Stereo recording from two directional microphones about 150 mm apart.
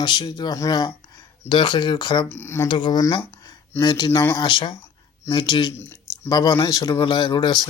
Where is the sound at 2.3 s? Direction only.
15° left (ahead or behind).